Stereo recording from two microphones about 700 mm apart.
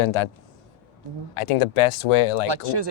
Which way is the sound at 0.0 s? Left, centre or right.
Left.